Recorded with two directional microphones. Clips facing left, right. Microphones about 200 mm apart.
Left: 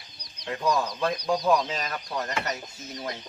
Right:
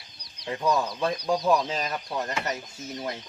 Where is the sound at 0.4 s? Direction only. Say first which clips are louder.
Right 1 dB; 5° right (ahead or behind).